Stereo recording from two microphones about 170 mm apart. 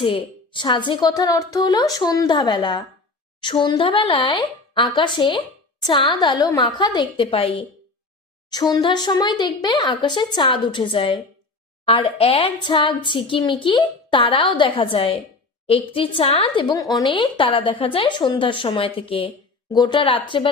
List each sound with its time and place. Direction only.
0.0 s a woman's voice: 30° left (ahead or behind)